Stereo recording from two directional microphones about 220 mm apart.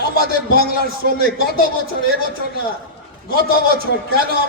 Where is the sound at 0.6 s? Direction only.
40° right (ahead or behind).